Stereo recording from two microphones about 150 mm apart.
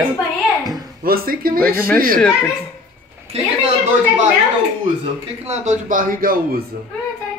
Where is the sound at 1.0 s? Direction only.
75° right (ahead or behind).